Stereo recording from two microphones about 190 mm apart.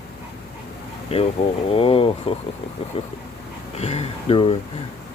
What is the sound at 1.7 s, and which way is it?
Speech, 30° left (ahead or behind).